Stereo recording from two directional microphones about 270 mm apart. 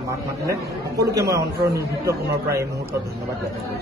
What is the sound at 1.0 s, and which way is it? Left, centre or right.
A man's voice, centre.